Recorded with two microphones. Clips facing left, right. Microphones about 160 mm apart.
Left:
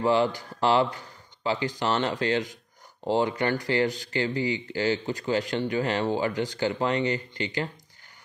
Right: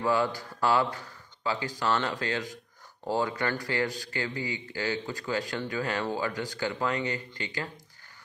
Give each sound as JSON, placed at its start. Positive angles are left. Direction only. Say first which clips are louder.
{"t": 0.0, "sound": "speech", "louder": "left 4 dB", "side_deg": 25}